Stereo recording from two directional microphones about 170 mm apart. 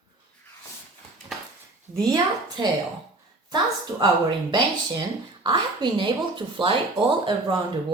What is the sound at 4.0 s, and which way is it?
Speech, 25° right (ahead or behind).